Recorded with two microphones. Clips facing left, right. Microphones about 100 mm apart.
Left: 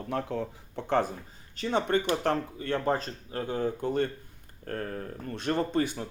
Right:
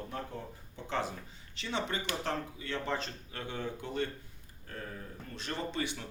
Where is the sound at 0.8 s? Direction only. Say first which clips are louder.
Left 8 dB; 50° left (ahead or behind).